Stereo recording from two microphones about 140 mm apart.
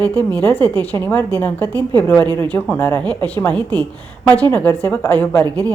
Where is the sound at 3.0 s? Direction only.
30° right (ahead or behind).